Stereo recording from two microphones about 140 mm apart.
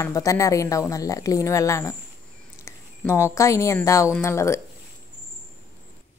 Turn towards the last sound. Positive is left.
turn(degrees=20)  # may be behind; listen again after turning